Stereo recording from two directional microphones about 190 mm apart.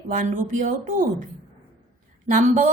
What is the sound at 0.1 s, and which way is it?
Speech, 45° right (ahead or behind).